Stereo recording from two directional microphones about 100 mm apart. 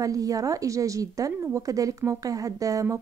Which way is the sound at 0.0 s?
35° right (ahead or behind).